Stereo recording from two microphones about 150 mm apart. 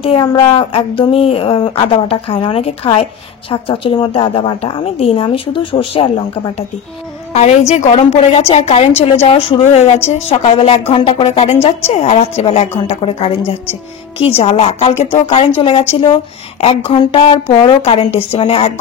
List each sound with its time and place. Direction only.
0.2 s speech: 25° left (ahead or behind)
0.5 s a woman's voice: 35° left (ahead or behind)
7.3 s a woman's voice: 50° left (ahead or behind)